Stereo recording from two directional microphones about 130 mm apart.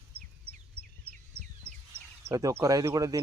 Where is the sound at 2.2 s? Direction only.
25° right (ahead or behind).